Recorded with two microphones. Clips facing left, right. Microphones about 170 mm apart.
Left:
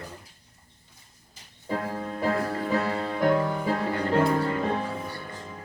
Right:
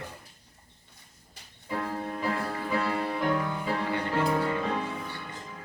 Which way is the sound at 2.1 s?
40° left (ahead or behind).